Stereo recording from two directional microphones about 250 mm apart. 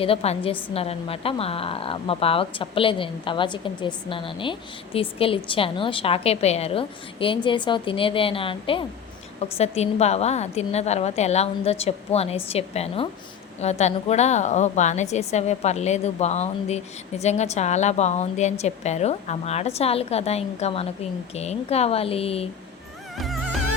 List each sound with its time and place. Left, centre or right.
0.0 s a woman's voice: left
23.1 s music: centre